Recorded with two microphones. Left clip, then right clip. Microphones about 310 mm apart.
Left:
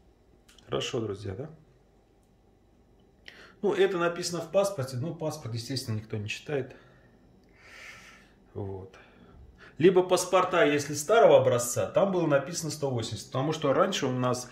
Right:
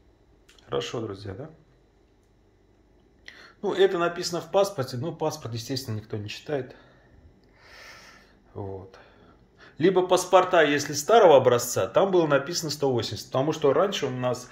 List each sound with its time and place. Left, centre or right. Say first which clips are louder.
0.6 s speech: right 2 dB; centre
3.3 s speech: left 1 dB; centre
7.6 s a sound: even; centre
9.6 s speech: even; centre